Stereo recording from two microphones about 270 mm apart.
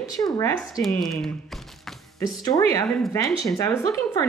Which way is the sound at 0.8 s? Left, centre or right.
Centre.